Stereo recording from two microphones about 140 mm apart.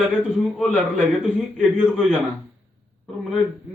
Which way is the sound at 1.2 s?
5° right (ahead or behind).